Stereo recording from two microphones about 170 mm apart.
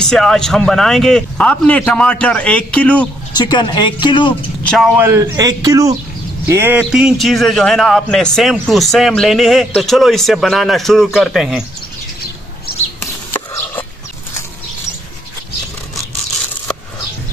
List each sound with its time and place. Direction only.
0.0 s a man's voice: 5° left (ahead or behind)
3.3 s speech: 25° left (ahead or behind)
4.6 s a man's voice: centre (ahead or behind)
4.9 s a man's voice: 15° right (ahead or behind)
13.0 s a sound: 10° left (ahead or behind)